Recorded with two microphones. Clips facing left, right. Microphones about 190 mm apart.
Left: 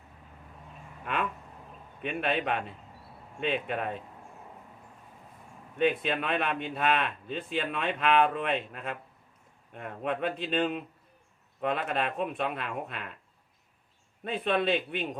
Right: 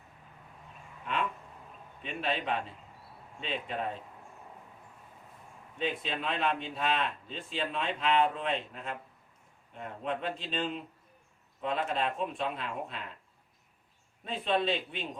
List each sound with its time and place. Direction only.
2.0 s a man's voice: 60° left (ahead or behind)
5.7 s a man's voice: 60° left (ahead or behind)
14.3 s a man's voice: 60° left (ahead or behind)